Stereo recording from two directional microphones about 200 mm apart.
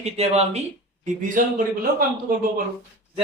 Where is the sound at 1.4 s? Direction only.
40° right (ahead or behind).